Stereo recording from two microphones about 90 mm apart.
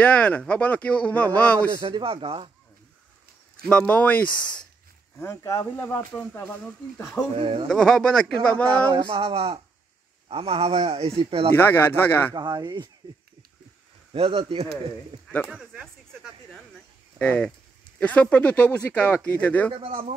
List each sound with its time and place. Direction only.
0.0 s a man's voice: 10° left (ahead or behind)
1.9 s speech: 85° right
3.6 s a man's voice: 15° left (ahead or behind)
5.2 s speech: 30° left (ahead or behind)
7.3 s speech: 90° right
7.6 s a man's voice: 5° left (ahead or behind)
8.6 s speech: 60° right (ahead or behind); by 11.5 s 85° right
11.5 s speech: 25° left (ahead or behind)
12.4 s speech: 55° right (ahead or behind)
14.1 s speech: 90° right
15.5 s speech: 5° right (ahead or behind)
17.2 s a man's voice: 10° left (ahead or behind)
19.7 s speech: 90° right